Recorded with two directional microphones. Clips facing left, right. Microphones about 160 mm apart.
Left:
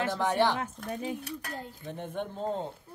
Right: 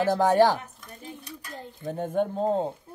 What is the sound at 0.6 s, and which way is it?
Dishes, 90° left.